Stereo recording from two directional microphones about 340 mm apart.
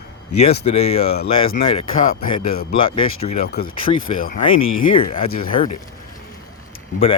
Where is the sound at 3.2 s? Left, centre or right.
Left.